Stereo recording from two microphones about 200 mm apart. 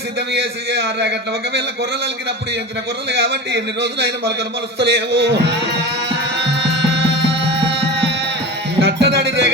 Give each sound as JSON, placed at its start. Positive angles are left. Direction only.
{"t": 0.3, "sound": "a man's voice", "side_deg": -60}
{"t": 3.1, "sound": "a man's voice", "side_deg": -60}
{"t": 4.8, "sound": "music", "side_deg": -60}